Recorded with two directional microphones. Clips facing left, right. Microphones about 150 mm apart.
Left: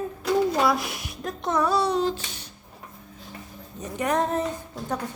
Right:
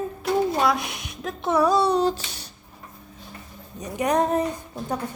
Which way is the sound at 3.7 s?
15° right (ahead or behind).